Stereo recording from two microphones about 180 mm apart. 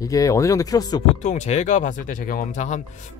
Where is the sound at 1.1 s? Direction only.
40° left (ahead or behind).